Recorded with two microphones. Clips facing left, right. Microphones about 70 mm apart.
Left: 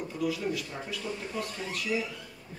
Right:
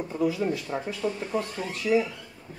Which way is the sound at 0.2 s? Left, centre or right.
Right.